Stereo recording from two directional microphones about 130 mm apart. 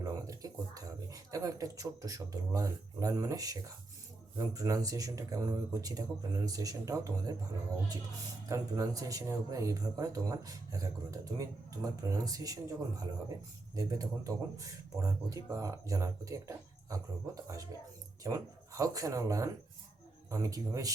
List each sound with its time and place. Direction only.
0.0 s speech: 25° right (ahead or behind)
8.4 s speech: 25° right (ahead or behind)